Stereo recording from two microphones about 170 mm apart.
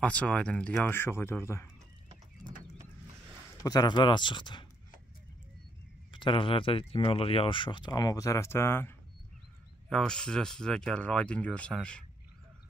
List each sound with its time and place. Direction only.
0.0 s speech: 10° left (ahead or behind)
3.6 s speech: 25° left (ahead or behind)
6.1 s speech: 30° left (ahead or behind); by 12.0 s 5° left (ahead or behind)